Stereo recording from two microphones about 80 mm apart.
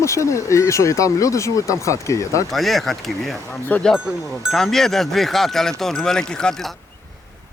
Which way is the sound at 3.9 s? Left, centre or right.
Centre.